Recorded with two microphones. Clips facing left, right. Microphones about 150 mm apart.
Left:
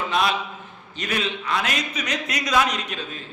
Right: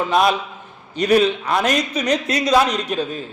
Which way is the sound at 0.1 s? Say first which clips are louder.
Right 5 dB; 45° right (ahead or behind).